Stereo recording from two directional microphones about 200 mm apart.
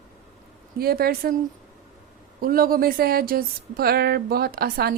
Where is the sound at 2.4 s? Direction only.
45° right (ahead or behind).